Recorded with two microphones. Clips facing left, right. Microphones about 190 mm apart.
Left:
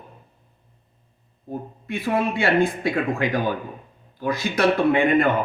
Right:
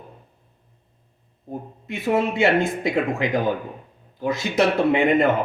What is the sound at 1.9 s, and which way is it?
Speech, 20° right (ahead or behind).